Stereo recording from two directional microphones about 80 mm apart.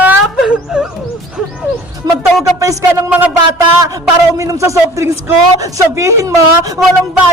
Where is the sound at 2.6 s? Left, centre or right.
Right.